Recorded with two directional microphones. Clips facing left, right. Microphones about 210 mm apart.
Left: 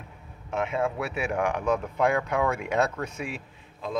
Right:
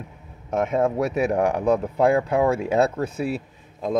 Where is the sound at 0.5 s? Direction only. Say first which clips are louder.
Right 6 dB; 45° right (ahead or behind).